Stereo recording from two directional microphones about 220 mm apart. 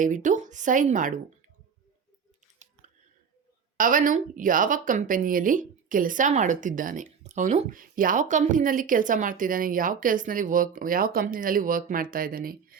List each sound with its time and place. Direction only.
0.0 s a woman's voice: 35° right (ahead or behind)
3.8 s a woman's voice: 35° right (ahead or behind)